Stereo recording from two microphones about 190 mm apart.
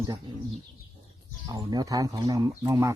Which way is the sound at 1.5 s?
20° right (ahead or behind).